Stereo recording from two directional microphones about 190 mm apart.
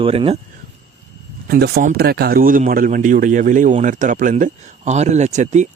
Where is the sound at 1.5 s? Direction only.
55° right (ahead or behind); by 5.6 s 40° right (ahead or behind).